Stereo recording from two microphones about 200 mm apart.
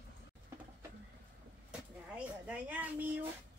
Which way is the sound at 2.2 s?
5° right (ahead or behind).